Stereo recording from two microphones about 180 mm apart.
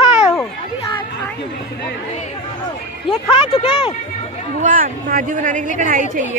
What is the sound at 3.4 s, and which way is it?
Speech, 30° left (ahead or behind).